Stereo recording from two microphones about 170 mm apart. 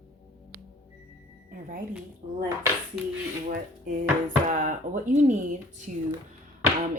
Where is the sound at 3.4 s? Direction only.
50° right (ahead or behind).